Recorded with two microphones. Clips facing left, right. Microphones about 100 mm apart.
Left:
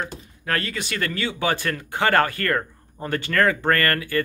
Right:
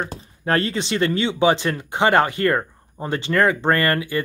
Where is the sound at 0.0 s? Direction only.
35° right (ahead or behind).